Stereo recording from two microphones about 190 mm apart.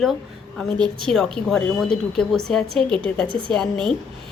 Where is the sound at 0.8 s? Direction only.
25° right (ahead or behind).